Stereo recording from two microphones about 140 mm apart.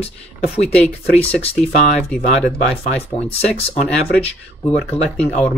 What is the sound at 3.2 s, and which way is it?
Speech, 45° left (ahead or behind).